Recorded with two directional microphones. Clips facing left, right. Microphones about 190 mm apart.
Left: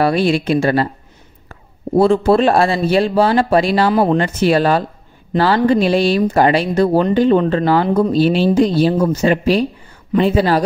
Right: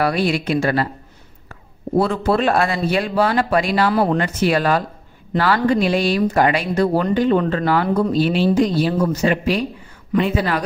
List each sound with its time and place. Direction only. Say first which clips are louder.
0.0 s speech: left 4 dB; 25° left (ahead or behind)